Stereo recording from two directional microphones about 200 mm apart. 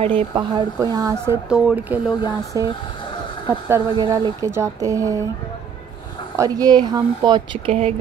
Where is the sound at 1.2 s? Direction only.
5° right (ahead or behind).